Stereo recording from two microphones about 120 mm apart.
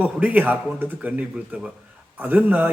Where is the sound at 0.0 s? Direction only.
10° right (ahead or behind).